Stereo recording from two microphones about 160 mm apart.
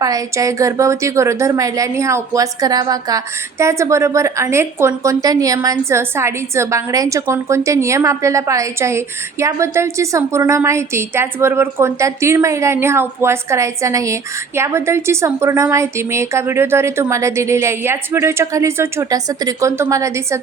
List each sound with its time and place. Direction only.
0.0 s a woman's voice: 20° right (ahead or behind)